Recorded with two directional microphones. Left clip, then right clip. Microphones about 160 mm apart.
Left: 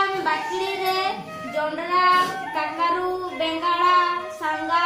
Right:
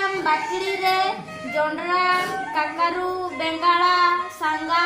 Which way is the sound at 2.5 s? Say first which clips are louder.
Right 2 dB; 60° right (ahead or behind).